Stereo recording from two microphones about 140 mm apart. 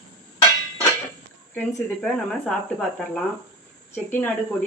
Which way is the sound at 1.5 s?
5° left (ahead or behind).